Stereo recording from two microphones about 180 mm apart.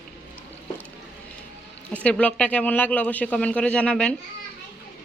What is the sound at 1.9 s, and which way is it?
Speech, 5° left (ahead or behind).